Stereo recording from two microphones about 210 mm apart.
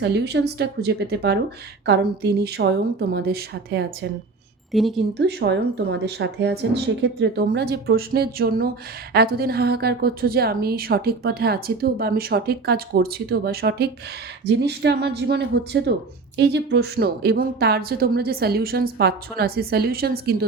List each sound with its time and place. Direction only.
0.0 s a woman's voice: 55° right (ahead or behind)
4.7 s speech: centre (ahead or behind)
5.1 s a woman's voice: 55° right (ahead or behind)